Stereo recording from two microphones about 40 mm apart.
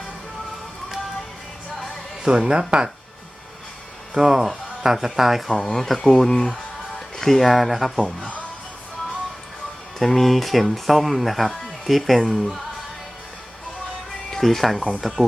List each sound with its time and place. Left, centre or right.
2.2 s speech: right
4.1 s speech: centre
5.5 s speech: centre
7.2 s speech: centre
10.0 s speech: centre
14.3 s speech: centre